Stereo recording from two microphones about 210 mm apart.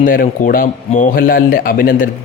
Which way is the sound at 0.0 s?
40° left (ahead or behind).